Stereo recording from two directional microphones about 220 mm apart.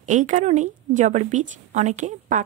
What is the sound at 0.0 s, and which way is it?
Speech, 35° right (ahead or behind).